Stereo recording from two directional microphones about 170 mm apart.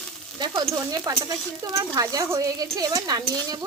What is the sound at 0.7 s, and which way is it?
Speech, 20° right (ahead or behind).